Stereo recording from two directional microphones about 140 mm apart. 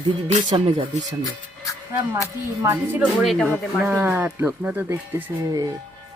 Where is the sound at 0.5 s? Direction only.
40° right (ahead or behind).